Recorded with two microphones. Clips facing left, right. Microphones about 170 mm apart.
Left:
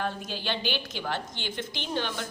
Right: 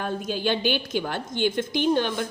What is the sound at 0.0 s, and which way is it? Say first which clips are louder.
A woman's voice: right 6 dB; 50° right (ahead or behind).